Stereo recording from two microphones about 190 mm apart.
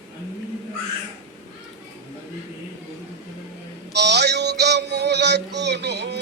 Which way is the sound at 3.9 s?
60° right (ahead or behind).